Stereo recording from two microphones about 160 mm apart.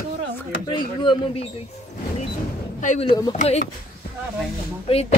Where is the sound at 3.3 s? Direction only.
45° left (ahead or behind).